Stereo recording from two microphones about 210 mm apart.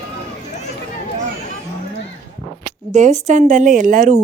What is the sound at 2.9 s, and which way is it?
Speech, 35° right (ahead or behind).